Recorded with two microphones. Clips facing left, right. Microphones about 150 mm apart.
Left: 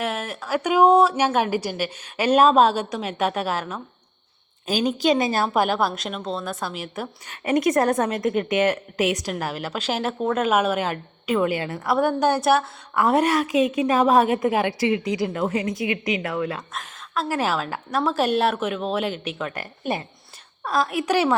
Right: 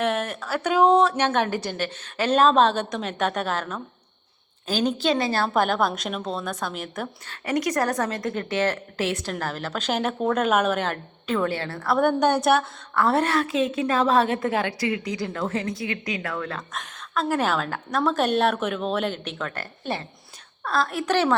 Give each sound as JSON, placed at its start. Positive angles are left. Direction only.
{"t": 0.0, "sound": "a woman's voice", "side_deg": 5}
{"t": 7.4, "sound": "a woman's voice", "side_deg": 25}
{"t": 11.9, "sound": "a woman's voice", "side_deg": 0}
{"t": 12.9, "sound": "a woman's voice", "side_deg": 15}